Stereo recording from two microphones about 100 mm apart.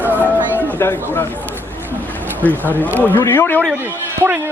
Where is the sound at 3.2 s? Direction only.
25° left (ahead or behind).